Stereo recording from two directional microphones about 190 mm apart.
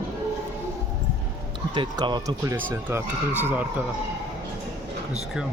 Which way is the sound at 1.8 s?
25° right (ahead or behind).